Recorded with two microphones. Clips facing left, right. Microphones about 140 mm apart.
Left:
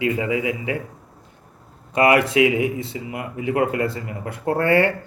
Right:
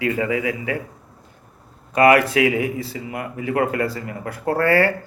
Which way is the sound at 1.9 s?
25° left (ahead or behind).